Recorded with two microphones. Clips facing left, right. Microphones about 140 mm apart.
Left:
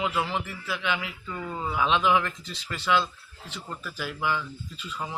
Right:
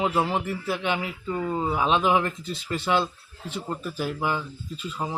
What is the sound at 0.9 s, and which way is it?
Speech, 30° right (ahead or behind).